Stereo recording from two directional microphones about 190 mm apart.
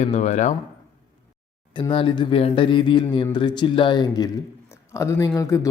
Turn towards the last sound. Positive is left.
turn(degrees=15)  # may be behind; listen again after turning